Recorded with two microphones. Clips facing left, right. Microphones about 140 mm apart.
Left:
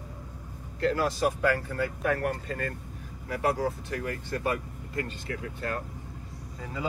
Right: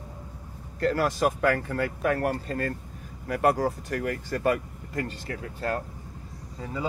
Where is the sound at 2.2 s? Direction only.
40° right (ahead or behind).